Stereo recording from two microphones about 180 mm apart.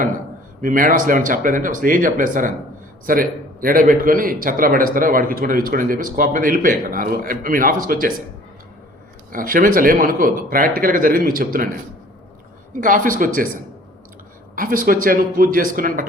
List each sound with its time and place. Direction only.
0.6 s a man's voice: 50° right (ahead or behind)
9.3 s a man's voice: 50° right (ahead or behind)
12.8 s a man's voice: 50° right (ahead or behind)
14.5 s a man's voice: 50° right (ahead or behind)